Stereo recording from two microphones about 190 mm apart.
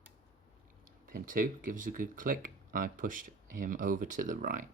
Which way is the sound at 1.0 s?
45° right (ahead or behind).